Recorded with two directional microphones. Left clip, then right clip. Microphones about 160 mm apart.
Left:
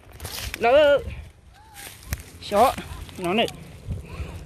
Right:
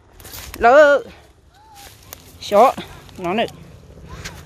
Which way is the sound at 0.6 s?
35° right (ahead or behind).